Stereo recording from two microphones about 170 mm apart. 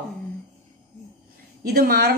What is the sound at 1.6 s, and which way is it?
Speech, 65° right (ahead or behind).